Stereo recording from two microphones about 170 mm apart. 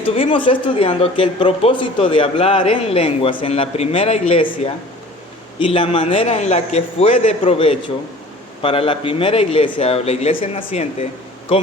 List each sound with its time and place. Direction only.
0.1 s speech: 30° left (ahead or behind)